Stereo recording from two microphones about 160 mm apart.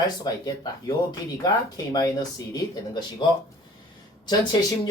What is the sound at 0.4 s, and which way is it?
Speech, 25° left (ahead or behind).